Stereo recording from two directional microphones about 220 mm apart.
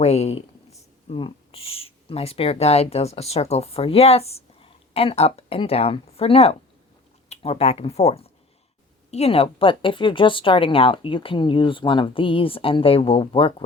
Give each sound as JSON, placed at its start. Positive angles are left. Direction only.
{"t": 0.0, "sound": "speech", "side_deg": 30}